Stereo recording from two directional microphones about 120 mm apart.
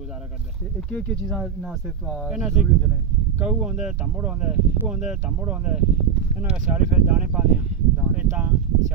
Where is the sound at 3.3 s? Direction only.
10° right (ahead or behind).